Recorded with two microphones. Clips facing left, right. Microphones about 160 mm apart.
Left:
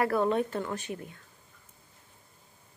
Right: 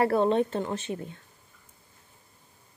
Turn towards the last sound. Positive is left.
turn(degrees=-25)  # may be behind; listen again after turning